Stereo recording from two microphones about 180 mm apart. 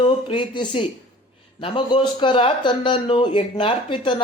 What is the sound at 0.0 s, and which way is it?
Speech, 25° left (ahead or behind).